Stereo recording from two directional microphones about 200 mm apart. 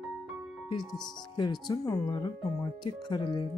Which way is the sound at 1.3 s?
20° left (ahead or behind).